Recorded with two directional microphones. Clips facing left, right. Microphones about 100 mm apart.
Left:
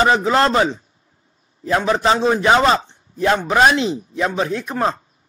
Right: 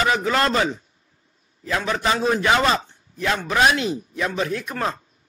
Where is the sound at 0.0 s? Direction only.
30° left (ahead or behind).